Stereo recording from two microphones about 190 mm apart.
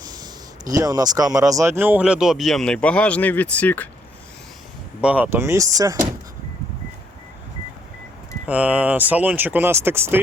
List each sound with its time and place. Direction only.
0.1 s speech: 20° right (ahead or behind); by 3.8 s 10° left (ahead or behind)
5.0 s speech: 10° right (ahead or behind)
8.4 s speech: 10° right (ahead or behind)